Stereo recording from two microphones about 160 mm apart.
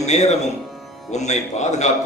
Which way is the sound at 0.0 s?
45° left (ahead or behind).